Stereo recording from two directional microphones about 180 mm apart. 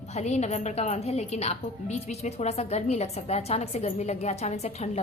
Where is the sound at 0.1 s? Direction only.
40° left (ahead or behind).